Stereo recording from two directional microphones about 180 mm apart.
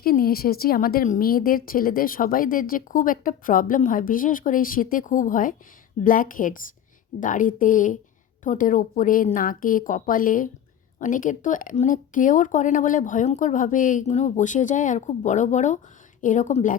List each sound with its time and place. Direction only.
0.0 s a woman's voice: 55° left (ahead or behind)